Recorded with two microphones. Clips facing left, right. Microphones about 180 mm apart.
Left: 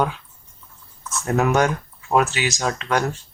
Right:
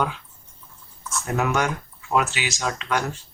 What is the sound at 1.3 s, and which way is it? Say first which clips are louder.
Speech: left 5 dB; 40° left (ahead or behind).